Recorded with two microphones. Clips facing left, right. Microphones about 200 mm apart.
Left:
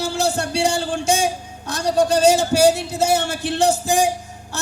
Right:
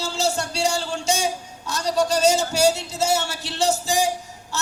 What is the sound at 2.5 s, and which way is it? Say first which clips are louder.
Speech: left 5 dB; 55° left (ahead or behind).